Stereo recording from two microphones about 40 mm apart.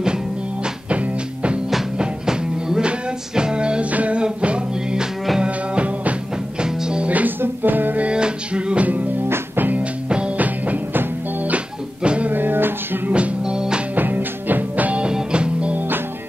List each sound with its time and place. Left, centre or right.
0.8 s music: right
2.0 s music: centre
7.1 s music: right
7.4 s music: right
8.0 s music: right
9.6 s music: right
10.0 s music: right
10.3 s music: right
11.4 s music: right
12.3 s music: right
13.1 s music: right
13.9 s music: right
15.0 s music: right